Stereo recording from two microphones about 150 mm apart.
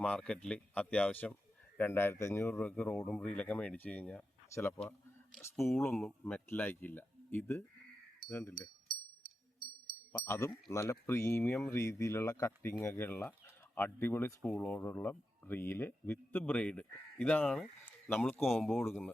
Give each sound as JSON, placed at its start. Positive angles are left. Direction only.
{"t": 0.0, "sound": "speech", "side_deg": 5}
{"t": 2.6, "sound": "speech", "side_deg": 5}
{"t": 5.5, "sound": "speech", "side_deg": 0}
{"t": 10.1, "sound": "speech", "side_deg": 20}